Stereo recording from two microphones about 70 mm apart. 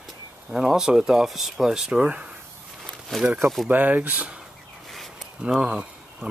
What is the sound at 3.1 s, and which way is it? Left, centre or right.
Speech, centre.